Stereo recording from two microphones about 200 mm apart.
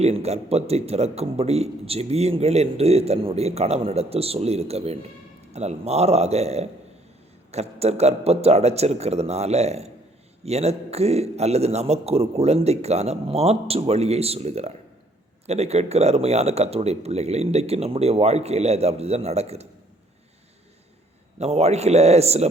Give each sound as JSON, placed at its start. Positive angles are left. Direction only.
{"t": 0.0, "sound": "a man's voice", "side_deg": -30}
{"t": 21.3, "sound": "a man's voice", "side_deg": -30}